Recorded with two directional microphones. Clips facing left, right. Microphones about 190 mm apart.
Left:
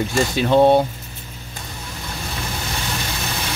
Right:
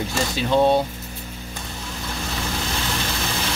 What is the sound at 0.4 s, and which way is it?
Speech, 60° left (ahead or behind).